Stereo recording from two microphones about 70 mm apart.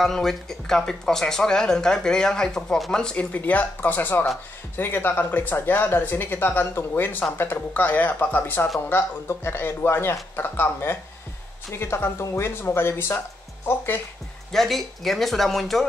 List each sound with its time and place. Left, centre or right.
0.0 s speech: centre
3.3 s speech: left
14.5 s speech: centre